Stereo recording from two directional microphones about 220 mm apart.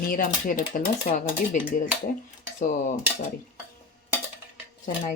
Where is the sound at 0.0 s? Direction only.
40° left (ahead or behind).